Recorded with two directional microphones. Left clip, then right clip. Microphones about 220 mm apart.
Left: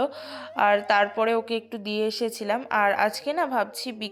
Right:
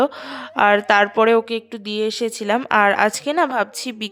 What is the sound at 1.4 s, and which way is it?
Speech, 20° right (ahead or behind).